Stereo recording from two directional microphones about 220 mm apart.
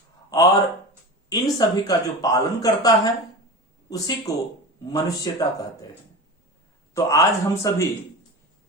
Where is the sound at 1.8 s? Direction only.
15° left (ahead or behind).